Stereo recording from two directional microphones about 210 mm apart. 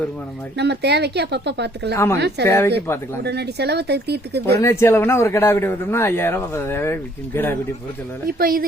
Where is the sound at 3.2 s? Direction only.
50° right (ahead or behind).